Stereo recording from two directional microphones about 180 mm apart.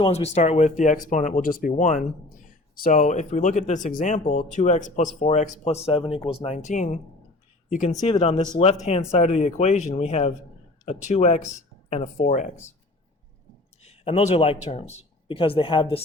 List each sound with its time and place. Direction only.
0.0 s speech: 35° left (ahead or behind)
13.8 s speech: 35° left (ahead or behind)